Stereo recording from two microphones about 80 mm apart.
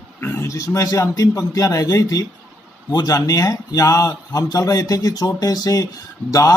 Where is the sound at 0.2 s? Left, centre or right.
Left.